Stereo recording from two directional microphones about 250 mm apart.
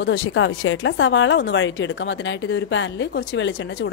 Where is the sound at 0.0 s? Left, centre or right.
Left.